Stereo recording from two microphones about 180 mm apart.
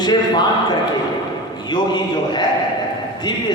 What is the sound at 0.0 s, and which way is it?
Speech, 25° left (ahead or behind).